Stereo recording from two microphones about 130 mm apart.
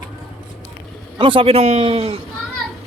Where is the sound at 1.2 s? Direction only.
40° right (ahead or behind).